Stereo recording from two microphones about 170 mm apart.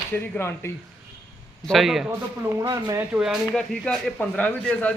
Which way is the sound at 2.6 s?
20° right (ahead or behind).